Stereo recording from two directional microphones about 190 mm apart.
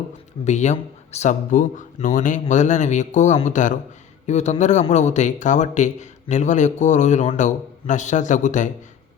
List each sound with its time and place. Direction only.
0.4 s a man's voice: 40° left (ahead or behind)